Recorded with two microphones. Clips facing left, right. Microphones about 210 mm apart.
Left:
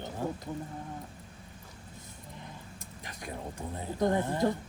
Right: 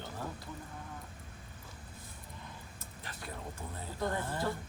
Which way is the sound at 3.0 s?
15° left (ahead or behind).